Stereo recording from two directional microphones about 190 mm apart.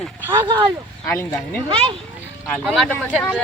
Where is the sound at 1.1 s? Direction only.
10° left (ahead or behind).